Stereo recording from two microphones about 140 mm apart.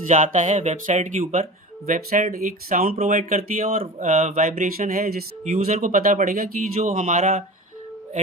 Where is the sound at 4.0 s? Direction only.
55° right (ahead or behind).